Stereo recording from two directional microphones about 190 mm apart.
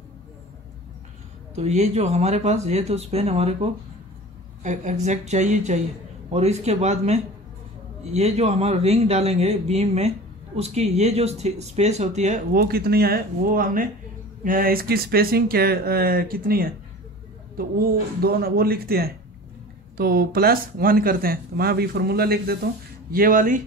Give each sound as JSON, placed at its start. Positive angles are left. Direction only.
{"t": 1.6, "sound": "speech", "side_deg": -35}
{"t": 12.5, "sound": "speech", "side_deg": -55}